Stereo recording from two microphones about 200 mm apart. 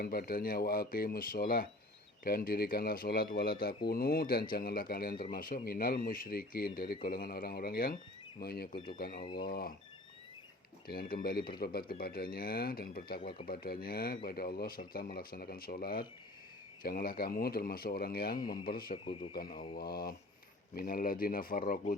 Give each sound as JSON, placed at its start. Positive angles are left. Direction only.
{"t": 0.0, "sound": "speech", "side_deg": 50}
{"t": 11.1, "sound": "speech", "side_deg": 50}